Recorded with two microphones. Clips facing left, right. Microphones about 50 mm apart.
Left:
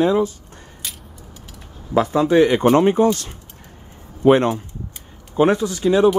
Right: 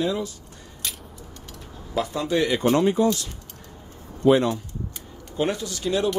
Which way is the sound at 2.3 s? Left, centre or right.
Left.